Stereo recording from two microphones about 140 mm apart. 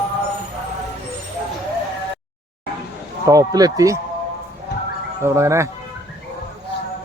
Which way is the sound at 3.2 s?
25° right (ahead or behind).